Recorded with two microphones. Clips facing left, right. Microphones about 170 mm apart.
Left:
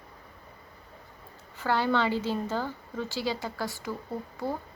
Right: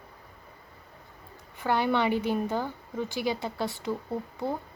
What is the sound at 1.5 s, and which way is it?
A woman's voice, 20° right (ahead or behind).